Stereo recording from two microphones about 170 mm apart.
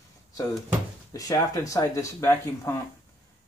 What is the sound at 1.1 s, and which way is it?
Speech, 20° left (ahead or behind).